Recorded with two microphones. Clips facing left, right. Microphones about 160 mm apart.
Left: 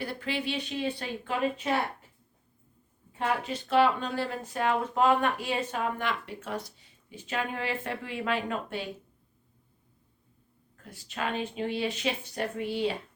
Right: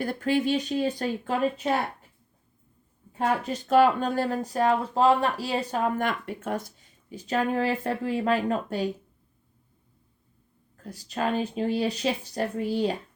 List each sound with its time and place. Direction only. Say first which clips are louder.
0.0 s speech: right 8 dB; 45° right (ahead or behind)
3.1 s speech: right 4 dB; 45° right (ahead or behind)
10.8 s speech: right 6 dB; 40° right (ahead or behind)